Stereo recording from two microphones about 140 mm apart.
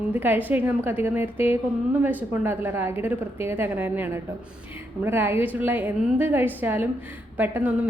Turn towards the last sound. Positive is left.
turn(degrees=-15)  # may be behind; listen again after turning